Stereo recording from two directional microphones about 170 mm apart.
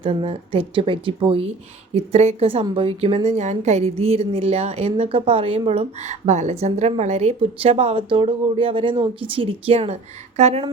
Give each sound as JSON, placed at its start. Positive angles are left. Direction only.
{"t": 0.0, "sound": "a woman's voice", "side_deg": -30}